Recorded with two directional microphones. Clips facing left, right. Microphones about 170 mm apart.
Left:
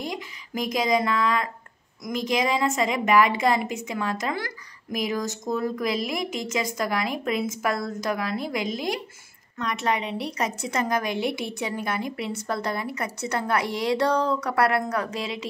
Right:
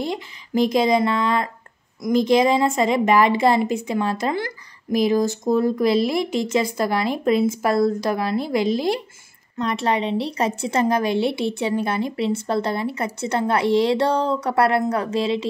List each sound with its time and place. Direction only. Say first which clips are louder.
0.0 s a woman's voice: right 6 dB; 30° right (ahead or behind)